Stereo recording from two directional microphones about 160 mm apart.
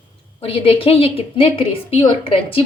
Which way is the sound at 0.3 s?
35° left (ahead or behind).